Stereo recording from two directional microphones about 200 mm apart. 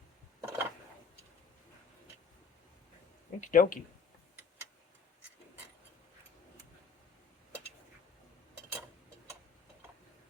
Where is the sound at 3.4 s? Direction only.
40° left (ahead or behind).